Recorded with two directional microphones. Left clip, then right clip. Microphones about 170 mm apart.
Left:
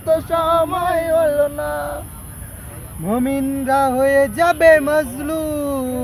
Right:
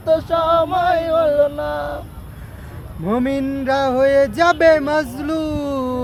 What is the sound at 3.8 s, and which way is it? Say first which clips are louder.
Speech: right 1 dB; 30° right (ahead or behind).